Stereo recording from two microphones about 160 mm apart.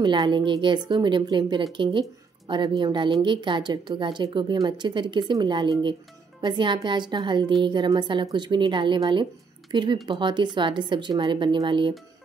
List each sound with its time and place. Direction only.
0.0 s a woman's voice: 30° right (ahead or behind)